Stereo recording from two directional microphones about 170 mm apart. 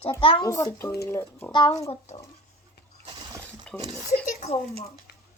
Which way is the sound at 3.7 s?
5° left (ahead or behind).